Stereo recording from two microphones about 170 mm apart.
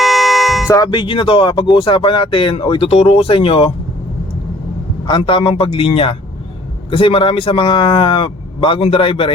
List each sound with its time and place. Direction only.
0.0 s music: centre (ahead or behind)
0.7 s speech: 25° left (ahead or behind)
5.0 s speech: 30° left (ahead or behind)